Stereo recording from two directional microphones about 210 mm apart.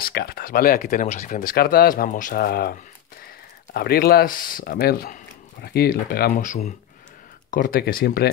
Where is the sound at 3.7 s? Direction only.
50° left (ahead or behind).